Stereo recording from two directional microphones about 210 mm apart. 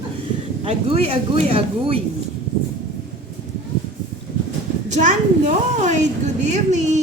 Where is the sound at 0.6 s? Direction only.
30° right (ahead or behind).